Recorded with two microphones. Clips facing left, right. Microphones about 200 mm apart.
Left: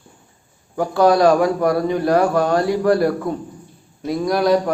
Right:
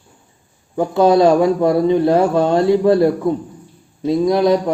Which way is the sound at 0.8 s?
25° right (ahead or behind).